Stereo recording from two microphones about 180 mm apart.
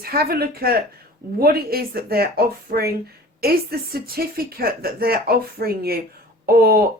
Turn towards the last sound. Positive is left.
turn(degrees=-60)  # may be behind; listen again after turning